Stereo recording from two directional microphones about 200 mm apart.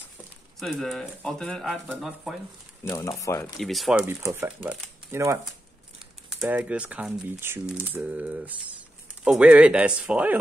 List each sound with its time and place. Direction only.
0.6 s speech: centre (ahead or behind)
2.8 s speech: 15° left (ahead or behind)
3.5 s speech: centre (ahead or behind)
4.0 s speech: 10° right (ahead or behind)